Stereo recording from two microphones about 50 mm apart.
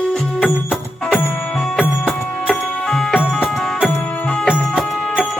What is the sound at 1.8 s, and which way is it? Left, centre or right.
Music, centre.